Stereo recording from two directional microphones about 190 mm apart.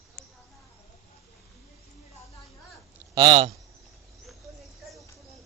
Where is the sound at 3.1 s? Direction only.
25° right (ahead or behind).